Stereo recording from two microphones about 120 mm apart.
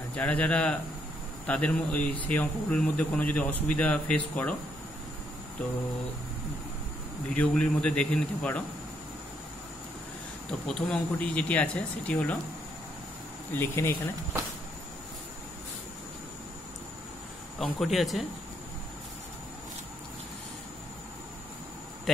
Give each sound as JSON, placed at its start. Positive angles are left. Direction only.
{"t": 0.1, "sound": "speech", "side_deg": 10}
{"t": 7.3, "sound": "speech", "side_deg": 10}
{"t": 10.7, "sound": "speech", "side_deg": 10}
{"t": 13.5, "sound": "speech", "side_deg": 20}
{"t": 17.6, "sound": "speech", "side_deg": 0}